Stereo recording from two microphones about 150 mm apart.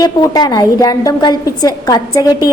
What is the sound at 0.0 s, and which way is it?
A woman's voice, 25° left (ahead or behind).